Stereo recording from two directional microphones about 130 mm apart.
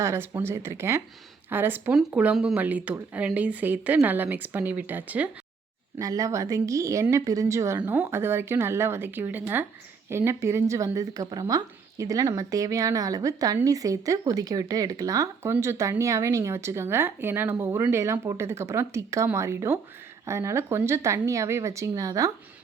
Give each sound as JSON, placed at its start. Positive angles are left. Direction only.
{"t": 0.0, "sound": "speech", "side_deg": -20}
{"t": 6.0, "sound": "speech", "side_deg": -25}